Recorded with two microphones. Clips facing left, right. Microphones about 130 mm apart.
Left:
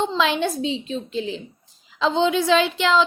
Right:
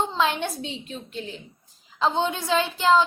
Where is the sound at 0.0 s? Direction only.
90° left.